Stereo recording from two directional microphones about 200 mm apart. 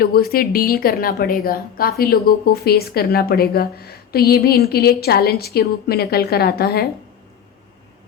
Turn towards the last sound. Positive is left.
turn(degrees=50)  # may be behind; listen again after turning